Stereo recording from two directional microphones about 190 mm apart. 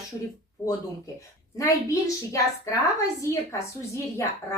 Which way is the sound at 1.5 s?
15° left (ahead or behind).